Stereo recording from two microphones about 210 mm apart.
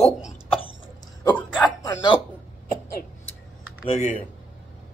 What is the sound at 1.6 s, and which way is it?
Speech, 20° left (ahead or behind).